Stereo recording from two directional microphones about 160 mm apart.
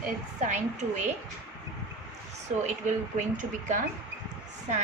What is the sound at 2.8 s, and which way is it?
Speech, 50° right (ahead or behind).